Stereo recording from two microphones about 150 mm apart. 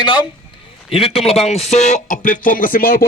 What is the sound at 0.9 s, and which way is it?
Speech, 40° left (ahead or behind).